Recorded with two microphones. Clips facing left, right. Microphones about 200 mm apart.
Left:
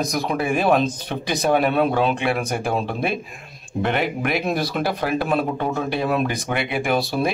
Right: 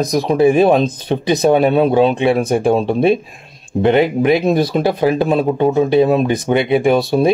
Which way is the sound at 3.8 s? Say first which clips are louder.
Right 10 dB; 25° right (ahead or behind).